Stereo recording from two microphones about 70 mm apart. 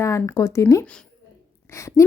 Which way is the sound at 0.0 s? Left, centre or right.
Left.